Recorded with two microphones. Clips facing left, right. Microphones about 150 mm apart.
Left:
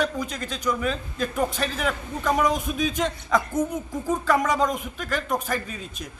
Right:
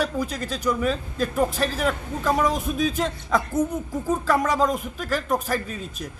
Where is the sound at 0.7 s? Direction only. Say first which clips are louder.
Right 2 dB; 5° right (ahead or behind).